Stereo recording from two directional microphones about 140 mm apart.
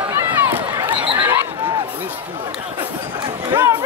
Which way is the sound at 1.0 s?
35° right (ahead or behind).